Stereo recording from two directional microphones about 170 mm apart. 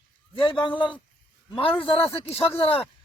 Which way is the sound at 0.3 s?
30° left (ahead or behind).